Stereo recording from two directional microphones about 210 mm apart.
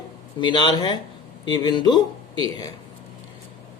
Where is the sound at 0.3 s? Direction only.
20° left (ahead or behind).